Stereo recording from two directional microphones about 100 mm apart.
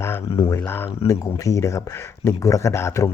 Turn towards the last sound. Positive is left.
turn(degrees=25)  # may be behind; listen again after turning